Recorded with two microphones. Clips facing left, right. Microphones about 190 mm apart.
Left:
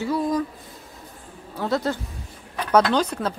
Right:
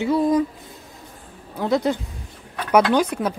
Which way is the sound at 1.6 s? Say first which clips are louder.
Right 4 dB; 15° right (ahead or behind).